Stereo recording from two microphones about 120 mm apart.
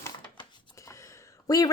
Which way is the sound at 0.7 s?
25° left (ahead or behind).